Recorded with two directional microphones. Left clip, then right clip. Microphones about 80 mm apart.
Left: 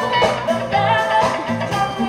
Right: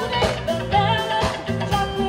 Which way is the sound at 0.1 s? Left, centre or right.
Right.